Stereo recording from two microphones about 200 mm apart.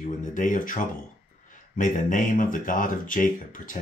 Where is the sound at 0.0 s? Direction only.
40° left (ahead or behind).